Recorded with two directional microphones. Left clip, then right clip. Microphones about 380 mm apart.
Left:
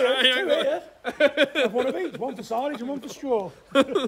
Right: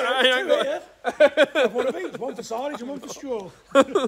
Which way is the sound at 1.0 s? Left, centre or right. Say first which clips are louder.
Right 4 dB; centre.